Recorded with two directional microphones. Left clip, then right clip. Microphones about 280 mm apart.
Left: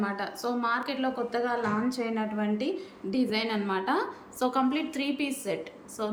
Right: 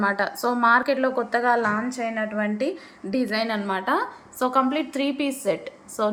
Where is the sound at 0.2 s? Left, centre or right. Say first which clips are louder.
Right 9 dB; centre.